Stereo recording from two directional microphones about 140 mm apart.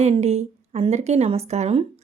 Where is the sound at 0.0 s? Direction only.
50° right (ahead or behind).